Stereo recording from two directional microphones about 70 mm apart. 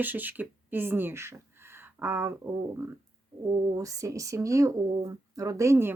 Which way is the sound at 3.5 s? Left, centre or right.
Right.